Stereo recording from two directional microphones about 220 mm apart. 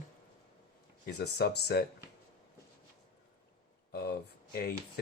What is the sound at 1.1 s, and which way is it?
Speech, 45° left (ahead or behind).